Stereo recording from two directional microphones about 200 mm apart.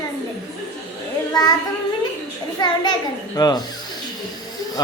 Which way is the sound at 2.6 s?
20° left (ahead or behind).